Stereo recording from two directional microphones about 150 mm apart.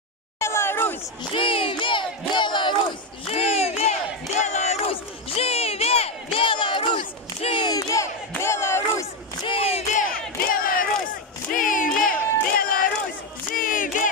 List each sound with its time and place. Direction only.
0.4 s a sound: 15° left (ahead or behind)
1.3 s crowd: 35° left (ahead or behind)
3.3 s crowd: 45° left (ahead or behind); by 9.0 s 15° left (ahead or behind)
9.5 s battle cry: 40° left (ahead or behind)
9.9 s battle cry: 70° left (ahead or behind)